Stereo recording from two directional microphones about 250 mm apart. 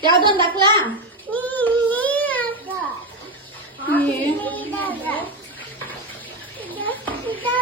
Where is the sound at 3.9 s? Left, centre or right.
Centre.